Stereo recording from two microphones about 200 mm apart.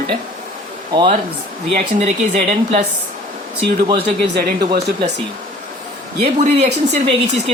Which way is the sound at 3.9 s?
50° right (ahead or behind).